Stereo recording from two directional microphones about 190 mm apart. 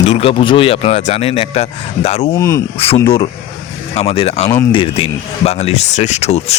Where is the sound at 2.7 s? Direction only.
30° left (ahead or behind).